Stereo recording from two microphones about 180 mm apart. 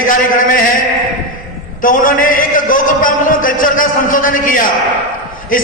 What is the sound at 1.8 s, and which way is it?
A man's voice, 50° left (ahead or behind).